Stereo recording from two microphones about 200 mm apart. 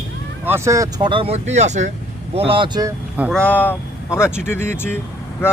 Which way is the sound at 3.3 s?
5° left (ahead or behind).